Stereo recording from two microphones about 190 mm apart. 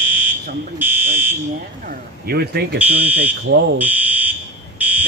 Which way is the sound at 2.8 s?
10° right (ahead or behind).